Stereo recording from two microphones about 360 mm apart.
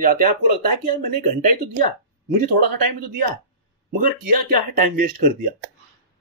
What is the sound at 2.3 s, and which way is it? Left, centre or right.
Speech, right.